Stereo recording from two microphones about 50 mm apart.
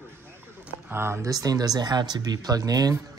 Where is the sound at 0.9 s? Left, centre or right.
Right.